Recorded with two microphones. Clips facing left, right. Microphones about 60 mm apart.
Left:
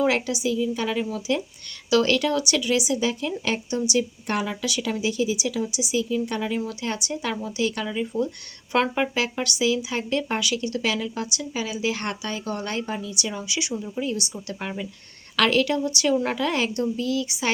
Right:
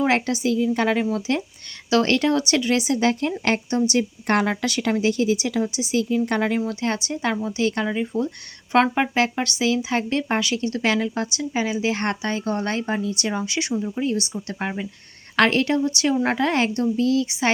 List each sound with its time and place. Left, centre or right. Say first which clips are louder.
0.0 s speech: right 2 dB; right
1.9 s speech: right 2 dB; right
4.3 s speech: right 5 dB; right
6.2 s speech: right 5 dB; right
6.7 s speech: right 4 dB; right
8.1 s speech: even; centre
8.7 s speech: right 4 dB; right